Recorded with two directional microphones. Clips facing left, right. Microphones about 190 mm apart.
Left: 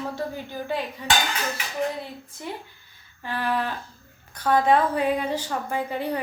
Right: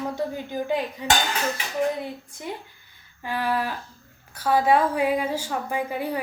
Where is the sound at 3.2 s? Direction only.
10° right (ahead or behind).